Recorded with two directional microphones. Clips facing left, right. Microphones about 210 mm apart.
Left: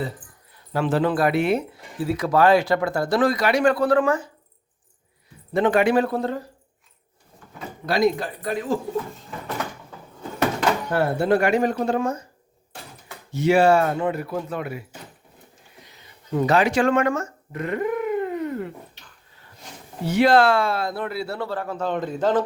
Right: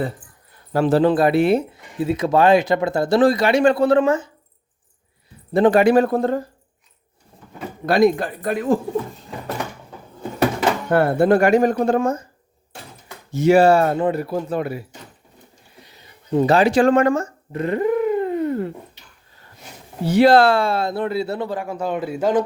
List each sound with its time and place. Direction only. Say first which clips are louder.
0.7 s speech: right 5 dB; 40° right (ahead or behind); by 4.3 s 25° right (ahead or behind)
5.5 s speech: right 5 dB; 35° right (ahead or behind)
7.9 s speech: right 5 dB; 55° right (ahead or behind)
10.9 s speech: right 6 dB; 55° right (ahead or behind)
13.3 s speech: right 3 dB; 45° right (ahead or behind)
16.3 s speech: right 4 dB; 30° right (ahead or behind)
20.1 s speech: right 4 dB; 35° right (ahead or behind); by 22.4 s 10° right (ahead or behind)